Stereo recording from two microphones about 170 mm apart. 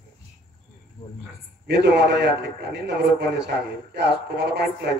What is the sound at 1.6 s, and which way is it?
A man's voice, 80° right.